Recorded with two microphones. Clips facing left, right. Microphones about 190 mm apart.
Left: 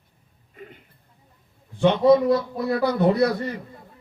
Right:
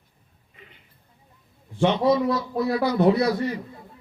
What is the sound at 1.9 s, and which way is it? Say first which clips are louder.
Speech: left 6 dB; 55° left (ahead or behind).